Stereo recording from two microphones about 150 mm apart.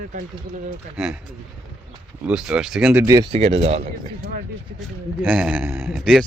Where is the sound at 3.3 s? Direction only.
40° right (ahead or behind).